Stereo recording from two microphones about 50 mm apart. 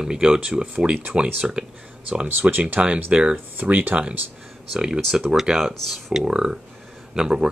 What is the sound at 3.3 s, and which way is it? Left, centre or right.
Speech, right.